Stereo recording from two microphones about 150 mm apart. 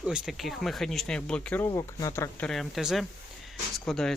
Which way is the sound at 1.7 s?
25° left (ahead or behind).